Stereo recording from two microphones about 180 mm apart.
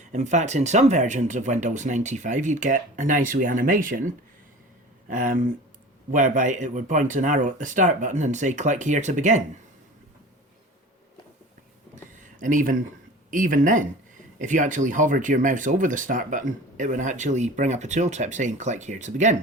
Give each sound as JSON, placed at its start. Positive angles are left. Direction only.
{"t": 0.1, "sound": "speech", "side_deg": -40}
{"t": 12.4, "sound": "speech", "side_deg": -45}